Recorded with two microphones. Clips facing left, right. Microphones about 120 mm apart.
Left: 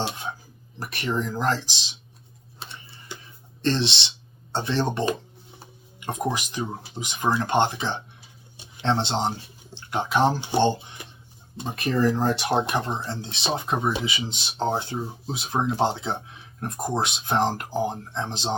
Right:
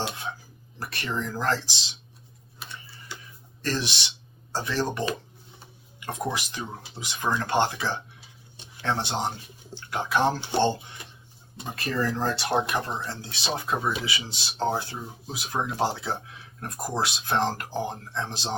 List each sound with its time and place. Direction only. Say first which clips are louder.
0.8 s speech: left 4 dB; 15° left (ahead or behind)
2.6 s a sound: left 1 dB; 25° left (ahead or behind)
3.6 s speech: left 5 dB; 25° left (ahead or behind)